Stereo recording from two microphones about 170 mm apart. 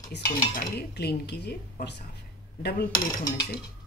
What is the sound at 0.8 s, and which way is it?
A woman's voice, 75° left (ahead or behind).